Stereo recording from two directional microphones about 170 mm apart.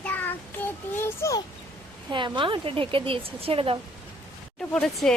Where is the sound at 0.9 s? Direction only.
15° left (ahead or behind).